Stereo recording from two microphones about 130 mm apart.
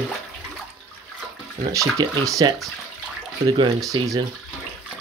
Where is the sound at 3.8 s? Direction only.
25° right (ahead or behind).